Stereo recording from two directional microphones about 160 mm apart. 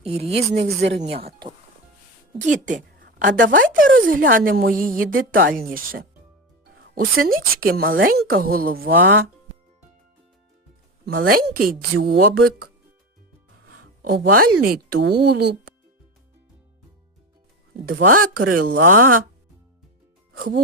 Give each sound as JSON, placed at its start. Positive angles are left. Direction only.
{"t": 0.0, "sound": "speech", "side_deg": -40}
{"t": 0.8, "sound": "speech", "side_deg": -90}
{"t": 1.0, "sound": "speech", "side_deg": -35}
{"t": 2.5, "sound": "speech", "side_deg": -50}
{"t": 3.2, "sound": "a woman's voice", "side_deg": -75}
{"t": 11.0, "sound": "speech", "side_deg": -80}
{"t": 14.0, "sound": "speech", "side_deg": -65}
{"t": 17.8, "sound": "a woman's voice", "side_deg": -65}